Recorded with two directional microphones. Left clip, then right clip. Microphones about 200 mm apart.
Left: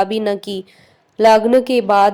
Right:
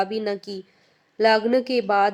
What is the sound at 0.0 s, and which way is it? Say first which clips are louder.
A woman's voice: left 7 dB; 30° left (ahead or behind).